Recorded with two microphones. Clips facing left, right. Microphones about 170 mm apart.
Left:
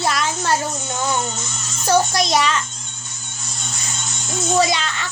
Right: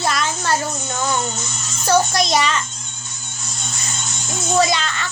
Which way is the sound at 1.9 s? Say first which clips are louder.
Even; 10° left (ahead or behind).